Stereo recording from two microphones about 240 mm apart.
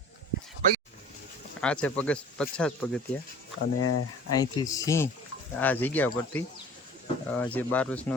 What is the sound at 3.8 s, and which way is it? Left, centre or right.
Speech, left.